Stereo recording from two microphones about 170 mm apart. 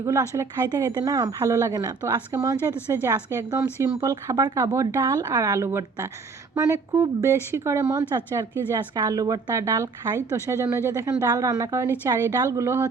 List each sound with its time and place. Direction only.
0.0 s a woman's voice: 20° right (ahead or behind)